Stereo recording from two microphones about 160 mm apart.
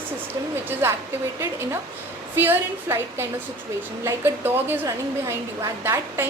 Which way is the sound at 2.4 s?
15° right (ahead or behind).